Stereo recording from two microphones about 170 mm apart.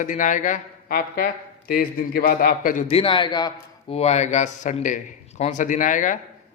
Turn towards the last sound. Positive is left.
turn(degrees=50)  # may be behind; listen again after turning